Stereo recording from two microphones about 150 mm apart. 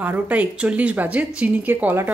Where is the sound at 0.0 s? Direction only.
10° right (ahead or behind).